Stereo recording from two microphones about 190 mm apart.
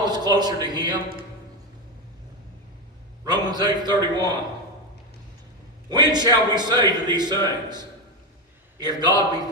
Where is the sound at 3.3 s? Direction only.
20° right (ahead or behind).